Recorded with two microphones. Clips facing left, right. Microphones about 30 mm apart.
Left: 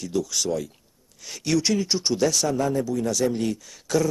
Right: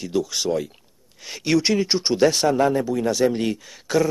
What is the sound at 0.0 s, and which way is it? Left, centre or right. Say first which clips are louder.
Speech: right 3 dB; right.